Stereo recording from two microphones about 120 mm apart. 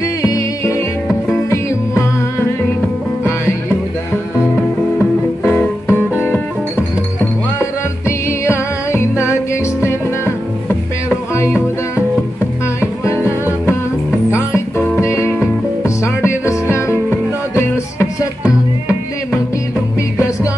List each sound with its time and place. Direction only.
0.2 s music: 30° left (ahead or behind)
5.4 s music: 20° left (ahead or behind)
8.3 s music: 20° left (ahead or behind)
11.3 s music: 20° left (ahead or behind)
13.0 s music: 25° left (ahead or behind)